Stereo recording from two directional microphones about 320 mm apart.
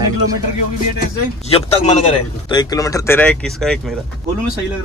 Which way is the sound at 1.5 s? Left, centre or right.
Left.